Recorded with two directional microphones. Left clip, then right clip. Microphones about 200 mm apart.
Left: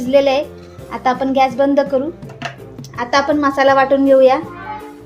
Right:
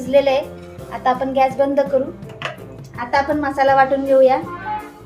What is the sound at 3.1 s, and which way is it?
A woman's voice, 50° left (ahead or behind).